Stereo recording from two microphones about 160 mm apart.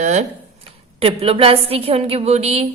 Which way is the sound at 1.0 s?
35° right (ahead or behind).